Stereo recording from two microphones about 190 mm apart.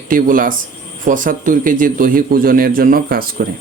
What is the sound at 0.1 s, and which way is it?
Speech, 45° right (ahead or behind).